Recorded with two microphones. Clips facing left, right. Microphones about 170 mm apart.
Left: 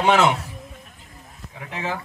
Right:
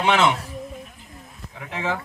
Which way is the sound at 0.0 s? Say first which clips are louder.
Left 2 dB; 45° left (ahead or behind).